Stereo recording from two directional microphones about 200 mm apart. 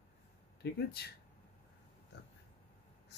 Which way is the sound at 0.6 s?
55° left (ahead or behind).